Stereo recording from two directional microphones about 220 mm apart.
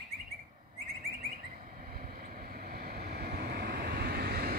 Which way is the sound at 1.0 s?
30° right (ahead or behind).